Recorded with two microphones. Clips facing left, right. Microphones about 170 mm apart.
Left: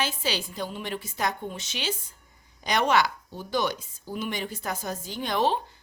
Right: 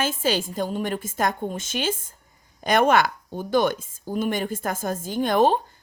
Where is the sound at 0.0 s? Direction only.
50° right (ahead or behind).